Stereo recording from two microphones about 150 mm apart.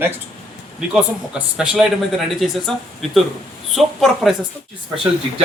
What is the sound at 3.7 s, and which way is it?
Speech, centre (ahead or behind).